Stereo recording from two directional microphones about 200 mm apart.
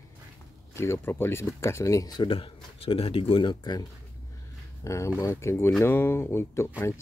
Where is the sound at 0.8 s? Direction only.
10° left (ahead or behind).